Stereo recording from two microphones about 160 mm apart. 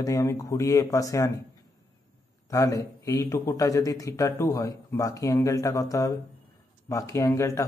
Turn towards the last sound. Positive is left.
turn(degrees=20)  # may be behind; listen again after turning